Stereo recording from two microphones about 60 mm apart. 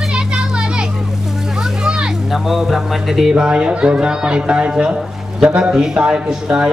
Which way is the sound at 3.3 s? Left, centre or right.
Centre.